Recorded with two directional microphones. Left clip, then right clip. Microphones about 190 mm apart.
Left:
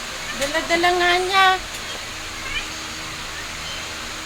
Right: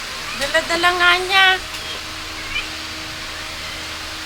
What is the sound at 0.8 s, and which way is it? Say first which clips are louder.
Speech: right 3 dB; 20° left (ahead or behind).